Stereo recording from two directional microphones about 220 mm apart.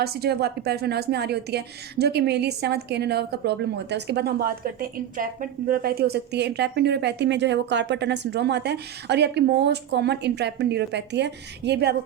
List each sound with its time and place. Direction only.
0.0 s a woman's voice: 45° right (ahead or behind)